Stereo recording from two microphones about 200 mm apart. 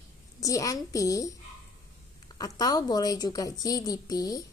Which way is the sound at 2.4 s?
20° left (ahead or behind).